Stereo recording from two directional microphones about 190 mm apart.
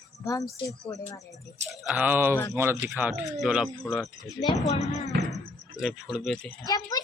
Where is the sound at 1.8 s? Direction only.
10° right (ahead or behind).